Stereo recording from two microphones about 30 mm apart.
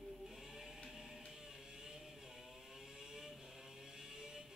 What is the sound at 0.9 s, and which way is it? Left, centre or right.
Music, centre.